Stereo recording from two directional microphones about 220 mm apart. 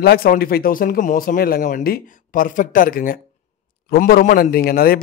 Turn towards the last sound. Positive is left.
turn(degrees=45)  # may be behind; listen again after turning